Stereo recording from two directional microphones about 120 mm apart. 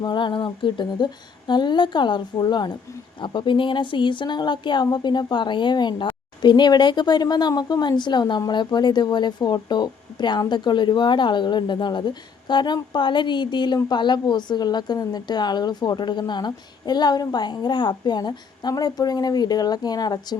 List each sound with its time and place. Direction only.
0.0 s speech: 40° left (ahead or behind)